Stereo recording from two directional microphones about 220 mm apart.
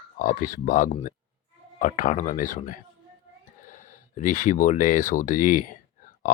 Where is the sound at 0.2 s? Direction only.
35° left (ahead or behind).